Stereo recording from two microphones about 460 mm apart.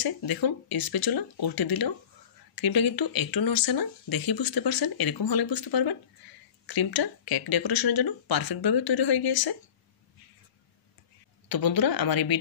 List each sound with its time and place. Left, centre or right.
0.0 s speech: left
11.4 s speech: left